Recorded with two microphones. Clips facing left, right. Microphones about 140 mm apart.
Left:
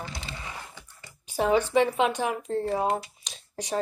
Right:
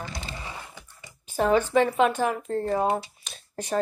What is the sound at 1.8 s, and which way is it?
Speech, 50° right (ahead or behind).